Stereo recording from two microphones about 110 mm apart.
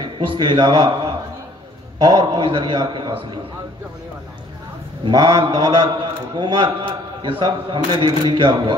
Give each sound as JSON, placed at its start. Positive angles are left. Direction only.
{"t": 0.0, "sound": "a man's voice", "side_deg": -50}
{"t": 5.0, "sound": "mantra", "side_deg": -35}
{"t": 6.3, "sound": "a man's voice", "side_deg": -45}